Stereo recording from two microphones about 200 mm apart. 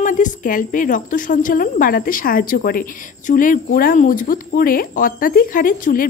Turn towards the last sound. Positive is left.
turn(degrees=45)  # may be behind; listen again after turning